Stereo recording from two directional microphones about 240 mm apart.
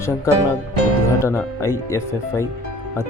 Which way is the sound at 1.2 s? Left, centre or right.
Centre.